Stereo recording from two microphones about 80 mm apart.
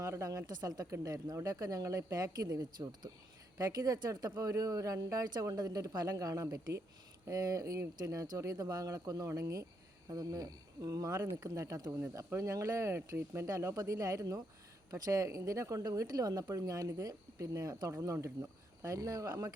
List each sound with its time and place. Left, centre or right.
0.0 s speech: right